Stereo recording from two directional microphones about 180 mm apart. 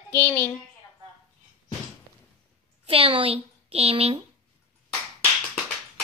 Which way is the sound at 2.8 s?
30° right (ahead or behind).